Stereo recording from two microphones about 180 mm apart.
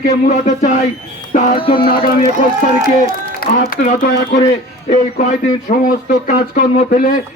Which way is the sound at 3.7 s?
45° left (ahead or behind).